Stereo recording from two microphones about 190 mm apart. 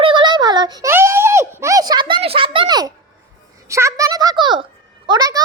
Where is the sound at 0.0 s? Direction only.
25° right (ahead or behind).